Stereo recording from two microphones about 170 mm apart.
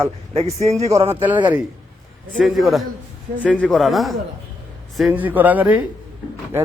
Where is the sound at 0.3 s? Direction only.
40° right (ahead or behind).